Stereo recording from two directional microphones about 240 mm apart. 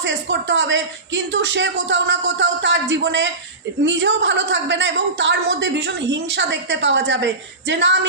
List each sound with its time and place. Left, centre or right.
0.0 s a woman's voice: right